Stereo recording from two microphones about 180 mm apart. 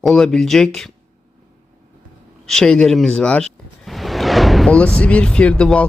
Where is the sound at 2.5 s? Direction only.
5° left (ahead or behind).